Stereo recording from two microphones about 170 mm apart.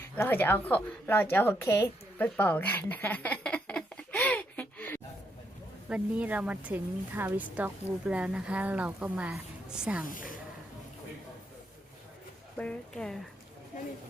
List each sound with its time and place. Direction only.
0.2 s a woman's voice: 10° left (ahead or behind)
5.9 s a woman's voice: 10° right (ahead or behind)
10.1 s speech: 55° left (ahead or behind)
12.5 s speech: 5° left (ahead or behind)